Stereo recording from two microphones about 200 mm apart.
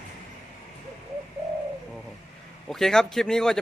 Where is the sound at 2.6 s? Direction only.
Centre (ahead or behind).